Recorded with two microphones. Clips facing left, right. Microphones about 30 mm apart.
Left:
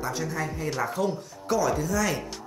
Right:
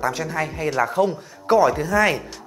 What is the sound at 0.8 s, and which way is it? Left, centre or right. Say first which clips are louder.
Speech: right 8 dB; right.